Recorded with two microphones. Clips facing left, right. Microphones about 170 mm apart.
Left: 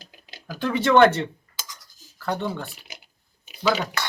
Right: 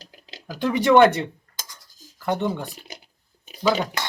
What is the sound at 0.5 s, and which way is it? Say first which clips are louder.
Speech: right 2 dB; 15° right (ahead or behind).